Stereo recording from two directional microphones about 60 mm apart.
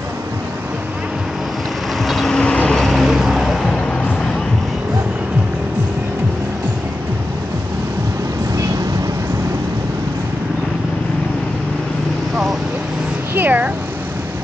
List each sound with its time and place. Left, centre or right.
2.0 s vehicle: centre
2.8 s vehicle: centre
13.3 s a sound: right